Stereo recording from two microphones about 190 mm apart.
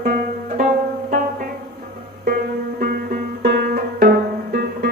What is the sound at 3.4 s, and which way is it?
Music, 50° right (ahead or behind).